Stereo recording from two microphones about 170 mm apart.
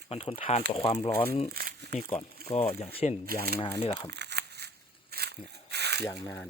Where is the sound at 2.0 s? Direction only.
40° left (ahead or behind).